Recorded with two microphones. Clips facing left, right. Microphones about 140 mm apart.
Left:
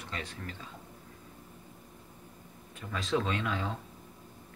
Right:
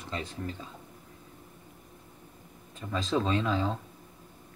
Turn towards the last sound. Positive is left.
turn(degrees=-30)  # may be behind; listen again after turning